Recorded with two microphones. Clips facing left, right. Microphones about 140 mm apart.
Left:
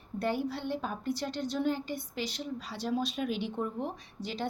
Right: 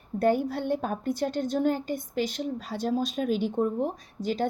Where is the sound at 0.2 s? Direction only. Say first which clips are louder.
Right 7 dB; 50° right (ahead or behind).